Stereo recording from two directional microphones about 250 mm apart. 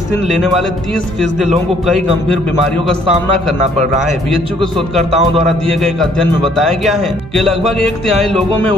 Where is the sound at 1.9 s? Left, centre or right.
Centre.